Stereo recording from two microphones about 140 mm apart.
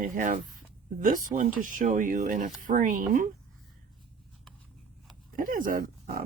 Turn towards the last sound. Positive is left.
turn(degrees=-85)